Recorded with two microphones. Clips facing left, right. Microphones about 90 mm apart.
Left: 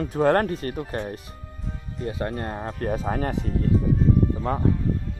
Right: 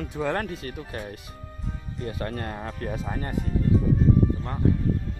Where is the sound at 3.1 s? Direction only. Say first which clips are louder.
Left 6 dB; 85° left.